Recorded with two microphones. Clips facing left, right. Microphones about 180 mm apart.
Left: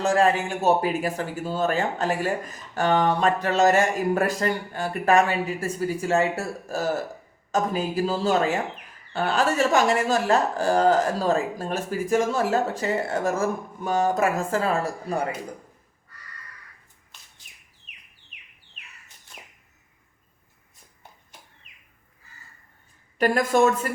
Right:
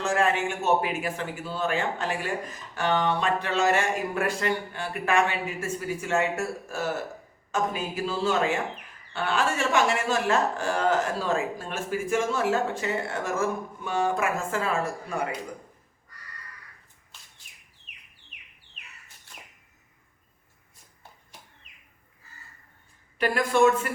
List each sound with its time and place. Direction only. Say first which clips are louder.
0.0 s speech: left 4 dB; 35° left (ahead or behind)
23.1 s a woman's voice: left 3 dB; 45° left (ahead or behind)